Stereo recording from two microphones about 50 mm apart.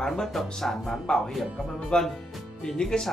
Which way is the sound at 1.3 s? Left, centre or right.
Centre.